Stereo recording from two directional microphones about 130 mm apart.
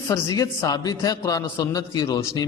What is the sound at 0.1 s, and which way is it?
A man's voice, 30° left (ahead or behind).